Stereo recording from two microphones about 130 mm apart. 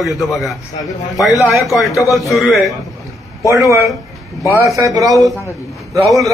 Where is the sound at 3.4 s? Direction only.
25° right (ahead or behind).